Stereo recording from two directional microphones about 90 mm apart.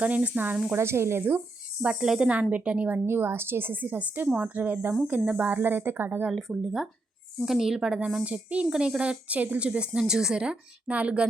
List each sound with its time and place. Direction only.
0.0 s speech: 15° right (ahead or behind)
0.8 s a woman's voice: 30° right (ahead or behind)
1.8 s speech: 10° right (ahead or behind)
3.1 s a woman's voice: 25° right (ahead or behind)
6.5 s speech: 5° right (ahead or behind)